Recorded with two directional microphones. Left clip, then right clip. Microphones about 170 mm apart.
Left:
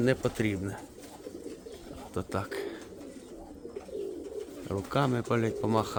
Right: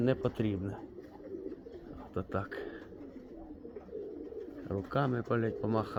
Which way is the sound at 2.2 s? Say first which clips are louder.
Left 3 dB; 15° left (ahead or behind).